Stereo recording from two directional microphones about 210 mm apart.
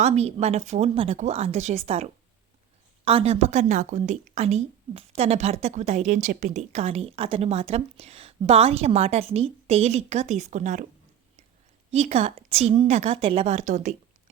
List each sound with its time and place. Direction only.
0.0 s a woman's voice: 30° right (ahead or behind)
11.9 s a woman's voice: 30° right (ahead or behind)